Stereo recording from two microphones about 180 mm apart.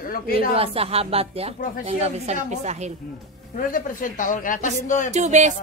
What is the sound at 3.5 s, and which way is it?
Speech, 45° left (ahead or behind).